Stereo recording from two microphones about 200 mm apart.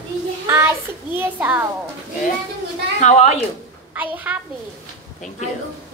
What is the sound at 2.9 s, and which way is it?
Speech, 35° left (ahead or behind).